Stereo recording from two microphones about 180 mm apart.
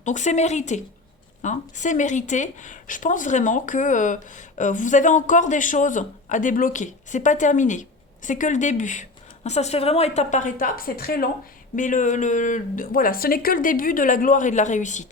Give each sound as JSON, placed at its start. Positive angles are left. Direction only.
{"t": 0.0, "sound": "speech", "side_deg": 40}
{"t": 11.8, "sound": "speech", "side_deg": 45}